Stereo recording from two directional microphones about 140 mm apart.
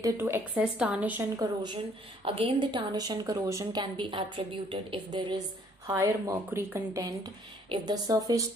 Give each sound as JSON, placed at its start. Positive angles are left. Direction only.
{"t": 0.0, "sound": "a woman's voice", "side_deg": -15}
{"t": 1.3, "sound": "a woman's voice", "side_deg": -30}
{"t": 5.9, "sound": "speech", "side_deg": -25}